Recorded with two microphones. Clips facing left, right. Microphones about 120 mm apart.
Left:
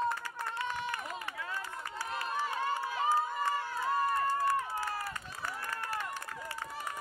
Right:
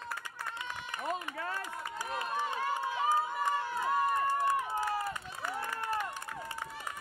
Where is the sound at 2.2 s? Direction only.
20° right (ahead or behind).